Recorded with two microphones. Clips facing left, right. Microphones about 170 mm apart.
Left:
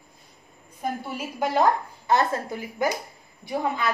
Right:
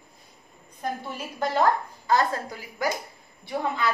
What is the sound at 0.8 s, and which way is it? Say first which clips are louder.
Speech: left 2 dB; 5° left (ahead or behind).